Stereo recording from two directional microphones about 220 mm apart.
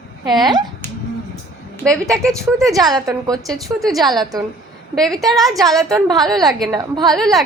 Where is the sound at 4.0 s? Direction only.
20° right (ahead or behind).